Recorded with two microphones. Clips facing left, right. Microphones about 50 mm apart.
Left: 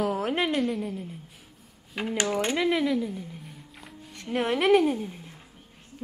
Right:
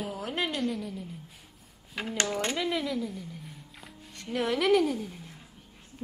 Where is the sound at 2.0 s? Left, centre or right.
Centre.